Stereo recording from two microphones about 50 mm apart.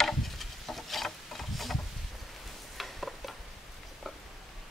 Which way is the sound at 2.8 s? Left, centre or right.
Centre.